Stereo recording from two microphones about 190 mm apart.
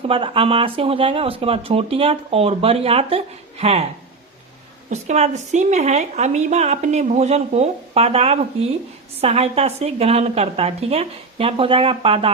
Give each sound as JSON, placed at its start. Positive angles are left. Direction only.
{"t": 0.1, "sound": "speech", "side_deg": -30}
{"t": 4.9, "sound": "a woman's voice", "side_deg": -35}